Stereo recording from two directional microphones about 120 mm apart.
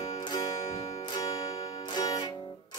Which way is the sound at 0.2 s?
40° left (ahead or behind).